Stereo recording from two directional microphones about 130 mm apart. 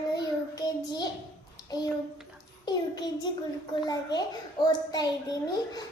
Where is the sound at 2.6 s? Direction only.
30° left (ahead or behind).